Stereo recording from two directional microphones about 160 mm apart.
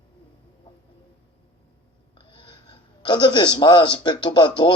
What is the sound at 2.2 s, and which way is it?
Speech, 30° left (ahead or behind).